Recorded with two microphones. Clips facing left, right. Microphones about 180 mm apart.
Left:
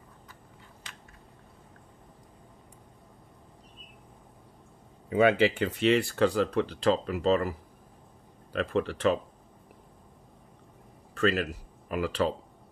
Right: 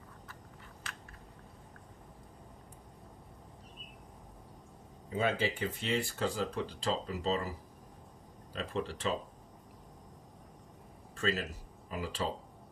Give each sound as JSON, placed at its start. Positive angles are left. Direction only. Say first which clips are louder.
{"t": 5.1, "sound": "speech", "louder": "left 10 dB", "side_deg": 75}
{"t": 8.5, "sound": "speech", "louder": "left 8 dB", "side_deg": 65}
{"t": 11.1, "sound": "speech", "louder": "left 8 dB", "side_deg": 70}